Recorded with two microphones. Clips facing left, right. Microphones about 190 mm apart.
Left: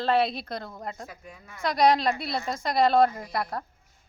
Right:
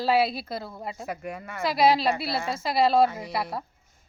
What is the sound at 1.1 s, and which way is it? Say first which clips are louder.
Speech: right 11 dB; 70° right (ahead or behind).